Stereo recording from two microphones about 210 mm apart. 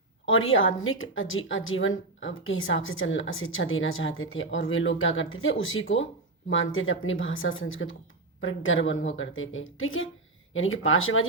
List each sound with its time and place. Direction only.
0.3 s a woman's voice: 70° left (ahead or behind)